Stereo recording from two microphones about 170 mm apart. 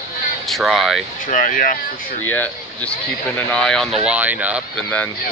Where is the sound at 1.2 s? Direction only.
50° left (ahead or behind).